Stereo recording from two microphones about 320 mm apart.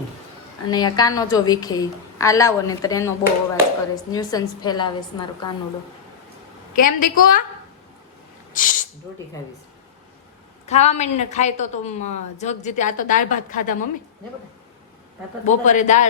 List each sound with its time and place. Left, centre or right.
0.7 s a woman's voice: centre
6.7 s a woman's voice: left
8.5 s speech: left
10.7 s a woman's voice: left
15.4 s a woman's voice: left